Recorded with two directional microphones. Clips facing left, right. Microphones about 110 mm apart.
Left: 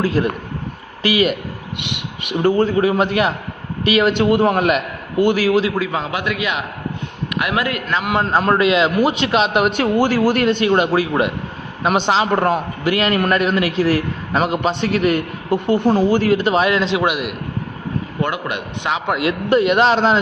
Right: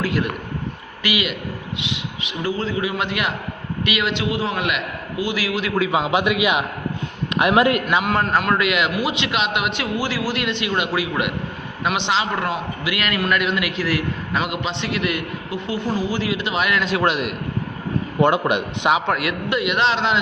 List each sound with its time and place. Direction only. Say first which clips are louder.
0.0 s a man's voice: left 4 dB; 35° left (ahead or behind)
1.8 s a man's voice: left 1 dB; 60° left (ahead or behind); by 5.6 s 45° left (ahead or behind)
5.9 s a man's voice: right 3 dB; 15° right (ahead or behind)
8.1 s a man's voice: left 7 dB; 25° left (ahead or behind)
9.0 s a man's voice: left 6 dB; 45° left (ahead or behind)
15.5 s a man's voice: left 9 dB; 55° left (ahead or behind)
16.6 s a man's voice: left 4 dB; 30° left (ahead or behind)
17.0 s a man's voice: left 1 dB; 5° left (ahead or behind)
18.2 s a man's voice: right 6 dB; 20° right (ahead or behind)
19.5 s a man's voice: left 7 dB; 40° left (ahead or behind)